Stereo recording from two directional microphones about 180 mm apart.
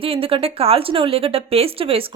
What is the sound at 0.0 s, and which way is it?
Speech, 30° right (ahead or behind).